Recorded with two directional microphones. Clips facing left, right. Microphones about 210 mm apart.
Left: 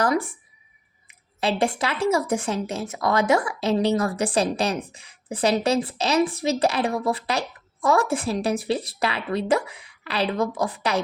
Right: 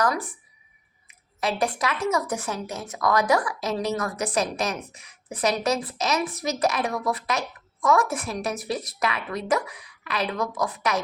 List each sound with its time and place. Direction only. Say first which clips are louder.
0.0 s a woman's voice: left 3 dB; 25° left (ahead or behind)